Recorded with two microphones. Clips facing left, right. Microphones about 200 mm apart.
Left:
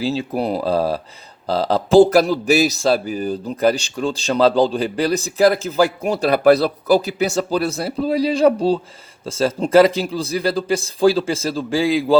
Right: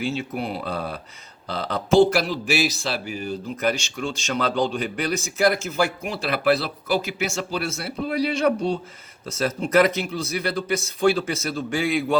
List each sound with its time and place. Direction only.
0.0 s a man's voice: 35° left (ahead or behind)